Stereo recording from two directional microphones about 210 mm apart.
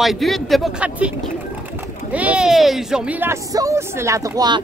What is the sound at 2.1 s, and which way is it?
A woman's voice, 5° right (ahead or behind).